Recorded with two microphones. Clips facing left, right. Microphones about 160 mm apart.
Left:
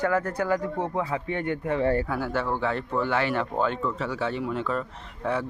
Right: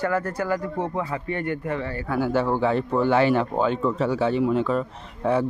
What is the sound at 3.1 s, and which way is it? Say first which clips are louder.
Speech: right 9 dB; 30° right (ahead or behind).